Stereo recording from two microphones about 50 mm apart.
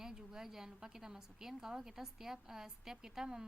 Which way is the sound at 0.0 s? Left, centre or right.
Centre.